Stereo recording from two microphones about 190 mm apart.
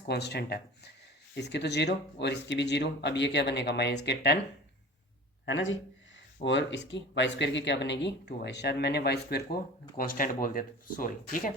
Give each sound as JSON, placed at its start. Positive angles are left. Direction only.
{"t": 0.1, "sound": "speech", "side_deg": 60}
{"t": 5.5, "sound": "speech", "side_deg": 80}
{"t": 6.4, "sound": "speech", "side_deg": 70}